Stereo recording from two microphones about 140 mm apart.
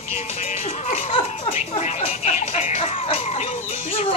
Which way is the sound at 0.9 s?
45° left (ahead or behind).